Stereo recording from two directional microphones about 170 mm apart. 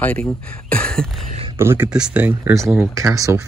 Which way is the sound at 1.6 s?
10° right (ahead or behind).